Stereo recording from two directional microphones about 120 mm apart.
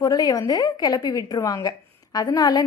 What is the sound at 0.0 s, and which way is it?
A woman's voice, 30° left (ahead or behind).